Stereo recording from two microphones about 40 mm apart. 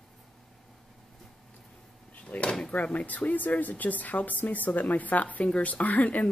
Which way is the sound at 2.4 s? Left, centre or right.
Left.